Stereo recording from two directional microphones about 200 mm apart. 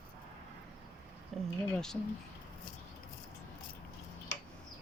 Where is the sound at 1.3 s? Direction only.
Centre (ahead or behind).